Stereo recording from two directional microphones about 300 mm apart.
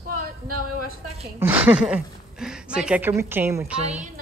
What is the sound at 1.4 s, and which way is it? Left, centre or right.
Speech, centre.